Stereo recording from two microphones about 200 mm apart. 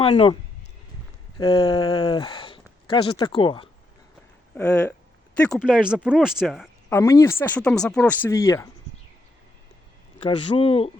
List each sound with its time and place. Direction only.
0.0 s speech: 30° left (ahead or behind)
1.4 s speech: 25° left (ahead or behind)
4.5 s speech: 10° left (ahead or behind)
5.6 s speech: 5° right (ahead or behind)
6.9 s speech: 15° left (ahead or behind)
10.2 s speech: 25° left (ahead or behind)